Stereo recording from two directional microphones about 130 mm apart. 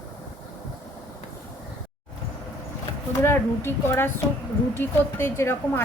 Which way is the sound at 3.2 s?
15° left (ahead or behind).